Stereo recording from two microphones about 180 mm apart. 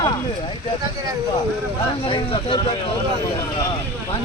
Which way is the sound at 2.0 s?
30° left (ahead or behind).